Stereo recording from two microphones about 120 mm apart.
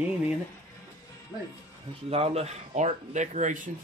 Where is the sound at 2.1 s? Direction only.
55° right (ahead or behind); by 3.6 s 90° right.